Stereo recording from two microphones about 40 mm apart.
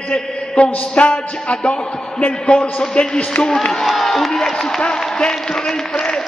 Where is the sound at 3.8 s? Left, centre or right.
Centre; by 6.0 s left.